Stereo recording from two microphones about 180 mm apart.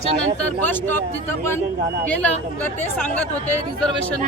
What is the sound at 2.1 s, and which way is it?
Speech, 10° left (ahead or behind).